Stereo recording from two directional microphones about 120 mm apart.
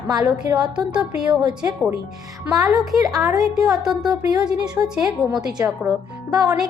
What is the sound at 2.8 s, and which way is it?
A woman's voice, 30° right (ahead or behind).